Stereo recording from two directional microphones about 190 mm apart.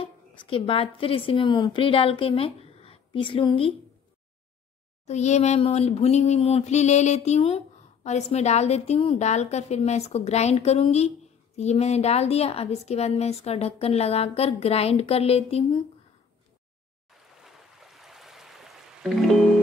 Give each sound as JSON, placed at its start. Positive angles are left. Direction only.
{"t": 0.0, "sound": "a woman's voice", "side_deg": 25}
{"t": 5.0, "sound": "a sound", "side_deg": 35}
{"t": 17.4, "sound": "music", "side_deg": 0}